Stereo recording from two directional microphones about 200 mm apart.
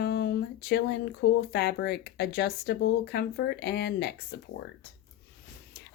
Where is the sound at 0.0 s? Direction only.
55° left (ahead or behind).